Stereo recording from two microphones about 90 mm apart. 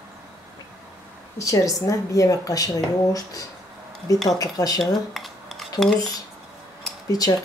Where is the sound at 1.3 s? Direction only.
35° left (ahead or behind).